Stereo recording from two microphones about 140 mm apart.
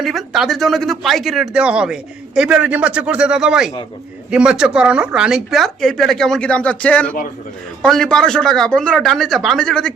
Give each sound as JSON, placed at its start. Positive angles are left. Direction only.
{"t": 0.0, "sound": "speech", "side_deg": 0}